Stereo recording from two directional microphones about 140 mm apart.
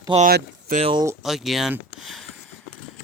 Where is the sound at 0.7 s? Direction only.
90° right.